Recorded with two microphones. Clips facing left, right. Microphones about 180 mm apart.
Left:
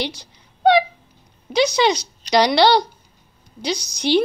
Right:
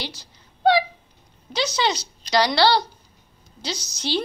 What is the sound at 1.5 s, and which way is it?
A woman's voice, 15° left (ahead or behind).